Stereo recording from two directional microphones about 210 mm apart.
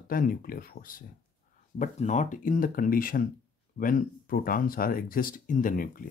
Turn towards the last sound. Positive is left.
turn(degrees=40)  # may be behind; listen again after turning